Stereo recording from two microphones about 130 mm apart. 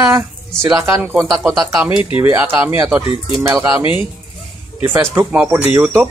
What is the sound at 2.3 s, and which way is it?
Speech, 15° right (ahead or behind).